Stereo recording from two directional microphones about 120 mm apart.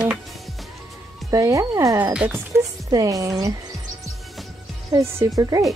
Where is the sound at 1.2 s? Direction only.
25° right (ahead or behind).